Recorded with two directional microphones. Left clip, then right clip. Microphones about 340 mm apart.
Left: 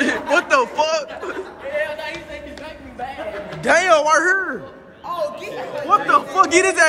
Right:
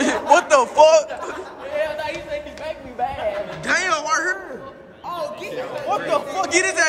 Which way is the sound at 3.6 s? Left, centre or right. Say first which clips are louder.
Left 7 dB; centre.